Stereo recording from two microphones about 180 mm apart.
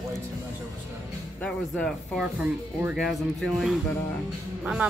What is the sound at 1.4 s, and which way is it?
Speech, 5° left (ahead or behind).